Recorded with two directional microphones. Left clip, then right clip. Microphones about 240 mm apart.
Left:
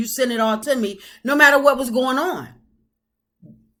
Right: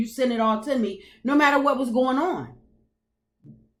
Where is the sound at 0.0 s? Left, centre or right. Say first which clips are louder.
Left 3 dB; centre.